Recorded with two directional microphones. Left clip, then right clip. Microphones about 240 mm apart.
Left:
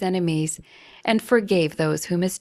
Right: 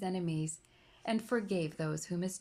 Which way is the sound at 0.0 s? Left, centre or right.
Left.